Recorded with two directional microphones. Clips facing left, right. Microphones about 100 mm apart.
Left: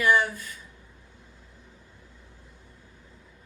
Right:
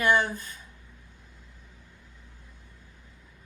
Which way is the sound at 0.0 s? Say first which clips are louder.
Left 1 dB; 25° right (ahead or behind).